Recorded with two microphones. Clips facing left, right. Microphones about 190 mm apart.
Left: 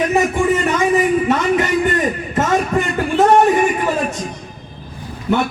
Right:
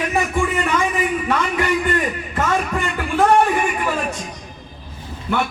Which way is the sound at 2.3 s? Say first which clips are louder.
Left 4 dB; 20° left (ahead or behind).